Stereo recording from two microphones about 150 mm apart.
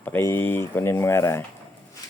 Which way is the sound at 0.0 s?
15° left (ahead or behind).